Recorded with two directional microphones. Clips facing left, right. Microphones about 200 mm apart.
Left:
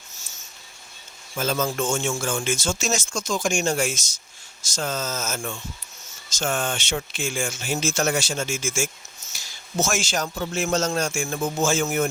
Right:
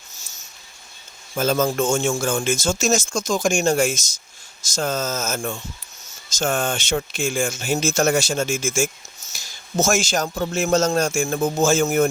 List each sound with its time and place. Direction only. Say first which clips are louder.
1.4 s a man's voice: right 5 dB; 45° right (ahead or behind)